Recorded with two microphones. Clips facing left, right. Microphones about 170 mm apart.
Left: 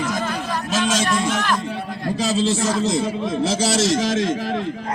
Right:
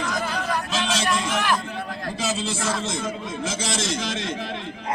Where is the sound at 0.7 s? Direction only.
45° left (ahead or behind).